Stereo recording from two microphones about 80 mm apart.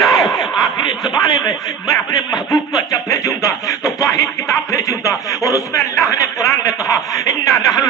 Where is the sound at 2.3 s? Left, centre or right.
Left.